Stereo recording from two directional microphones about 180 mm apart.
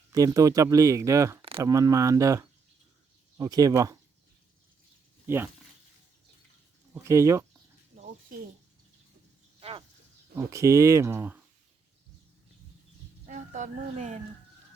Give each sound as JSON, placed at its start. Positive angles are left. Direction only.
{"t": 0.1, "sound": "speech", "side_deg": -20}
{"t": 1.4, "sound": "a sound", "side_deg": -30}
{"t": 1.6, "sound": "speech", "side_deg": -20}
{"t": 5.2, "sound": "speech", "side_deg": -10}
{"t": 6.9, "sound": "speech", "side_deg": -15}
{"t": 7.9, "sound": "bird", "side_deg": -40}
{"t": 9.6, "sound": "a sound", "side_deg": -30}
{"t": 10.3, "sound": "speech", "side_deg": -15}
{"t": 13.2, "sound": "speech", "side_deg": -45}